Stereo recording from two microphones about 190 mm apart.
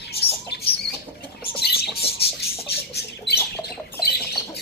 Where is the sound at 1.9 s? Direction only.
60° left (ahead or behind).